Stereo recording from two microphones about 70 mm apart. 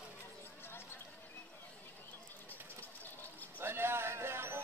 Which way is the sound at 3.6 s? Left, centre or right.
Right.